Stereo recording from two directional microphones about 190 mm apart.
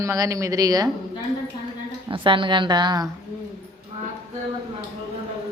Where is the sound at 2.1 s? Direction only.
25° right (ahead or behind).